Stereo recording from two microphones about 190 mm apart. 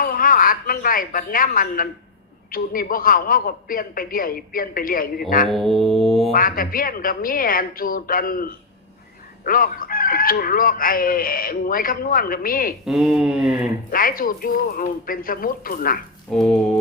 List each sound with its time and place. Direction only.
0.0 s a woman's voice: 50° left (ahead or behind)
5.5 s music: centre (ahead or behind)
6.3 s speech: 50° left (ahead or behind)
12.8 s music: centre (ahead or behind)
13.9 s speech: 50° left (ahead or behind)
16.3 s music: centre (ahead or behind)